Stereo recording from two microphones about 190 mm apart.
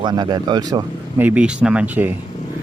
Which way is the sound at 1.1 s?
10° right (ahead or behind).